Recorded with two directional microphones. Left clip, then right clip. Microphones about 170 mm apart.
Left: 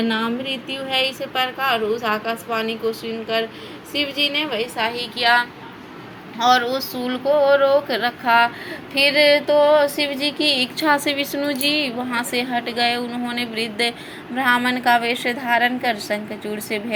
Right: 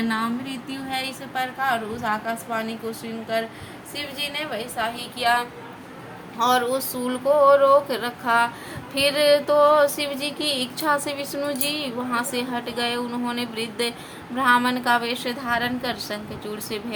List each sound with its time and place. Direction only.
0.1 s a woman's voice: 20° left (ahead or behind)
6.4 s music: centre (ahead or behind)